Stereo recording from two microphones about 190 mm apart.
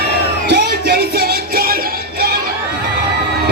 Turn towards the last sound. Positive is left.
turn(degrees=-55)  # may be behind; listen again after turning